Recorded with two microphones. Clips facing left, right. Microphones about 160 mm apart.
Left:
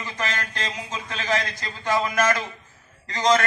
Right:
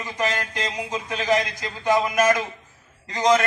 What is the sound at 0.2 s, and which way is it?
A man's voice, 15° right (ahead or behind).